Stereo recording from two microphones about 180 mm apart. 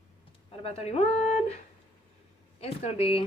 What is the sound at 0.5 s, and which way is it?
Speech, 35° left (ahead or behind).